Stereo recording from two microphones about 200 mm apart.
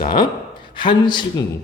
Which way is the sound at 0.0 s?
25° left (ahead or behind).